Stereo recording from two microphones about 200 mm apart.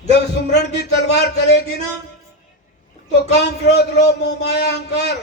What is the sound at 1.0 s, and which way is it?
Speech, 60° left (ahead or behind).